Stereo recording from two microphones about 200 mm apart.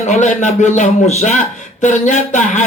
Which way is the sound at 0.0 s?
35° left (ahead or behind).